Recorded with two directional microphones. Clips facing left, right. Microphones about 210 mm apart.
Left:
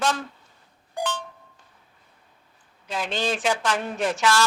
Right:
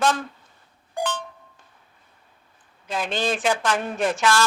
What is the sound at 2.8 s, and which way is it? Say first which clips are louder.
A woman's voice: right 2 dB; 50° right (ahead or behind).